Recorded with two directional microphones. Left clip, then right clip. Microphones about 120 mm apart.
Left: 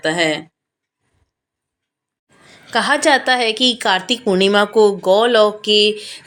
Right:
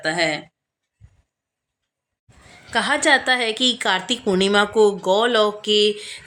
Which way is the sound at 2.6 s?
10° left (ahead or behind).